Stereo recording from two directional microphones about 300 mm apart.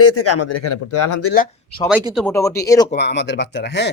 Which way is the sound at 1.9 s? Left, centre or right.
Centre.